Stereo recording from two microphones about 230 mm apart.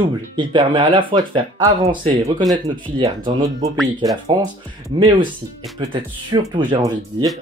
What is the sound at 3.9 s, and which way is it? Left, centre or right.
Speech, centre.